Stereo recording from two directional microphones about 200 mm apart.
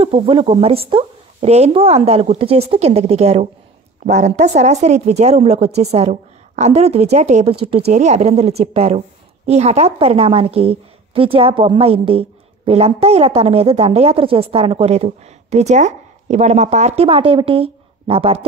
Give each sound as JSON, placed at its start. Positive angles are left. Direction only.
{"t": 0.0, "sound": "a woman's voice", "side_deg": -25}